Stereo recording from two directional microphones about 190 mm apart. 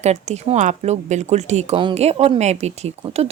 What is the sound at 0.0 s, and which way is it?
Speech, 35° right (ahead or behind).